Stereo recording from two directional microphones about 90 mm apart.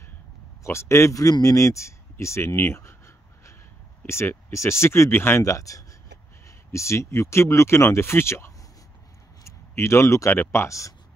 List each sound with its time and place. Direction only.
0.7 s speech: 30° left (ahead or behind)
4.0 s speech: 30° left (ahead or behind)